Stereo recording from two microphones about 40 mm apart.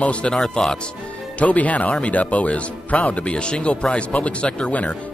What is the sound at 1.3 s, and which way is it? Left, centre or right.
Speech, left.